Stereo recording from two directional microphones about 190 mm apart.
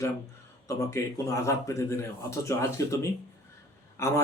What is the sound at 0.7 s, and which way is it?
Speech, 15° left (ahead or behind).